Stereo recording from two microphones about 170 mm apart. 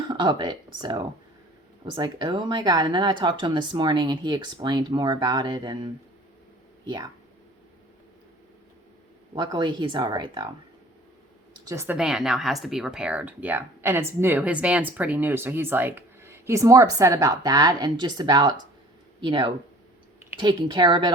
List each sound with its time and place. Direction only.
0.1 s speech: 25° right (ahead or behind)
9.3 s speech: 25° right (ahead or behind)
11.6 s speech: 15° right (ahead or behind)
11.9 s speech: 5° right (ahead or behind); by 21.1 s 25° right (ahead or behind)